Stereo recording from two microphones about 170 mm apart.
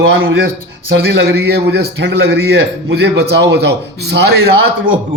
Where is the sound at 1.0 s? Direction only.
70° right (ahead or behind).